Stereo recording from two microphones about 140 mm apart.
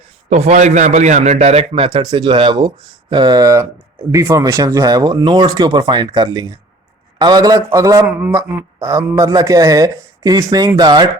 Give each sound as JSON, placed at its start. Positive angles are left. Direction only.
{"t": 0.3, "sound": "a man's voice", "side_deg": -50}
{"t": 8.0, "sound": "a man's voice", "side_deg": -10}